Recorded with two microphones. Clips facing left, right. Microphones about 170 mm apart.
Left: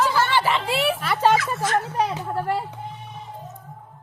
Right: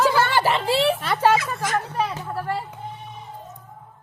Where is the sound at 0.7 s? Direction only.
25° right (ahead or behind).